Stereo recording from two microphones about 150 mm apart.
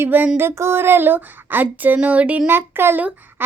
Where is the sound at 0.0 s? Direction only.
10° right (ahead or behind).